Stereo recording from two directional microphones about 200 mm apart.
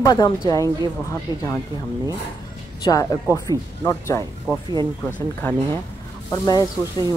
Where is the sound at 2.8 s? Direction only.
15° left (ahead or behind).